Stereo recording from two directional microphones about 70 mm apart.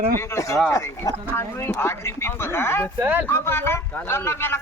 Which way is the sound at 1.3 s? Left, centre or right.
Left.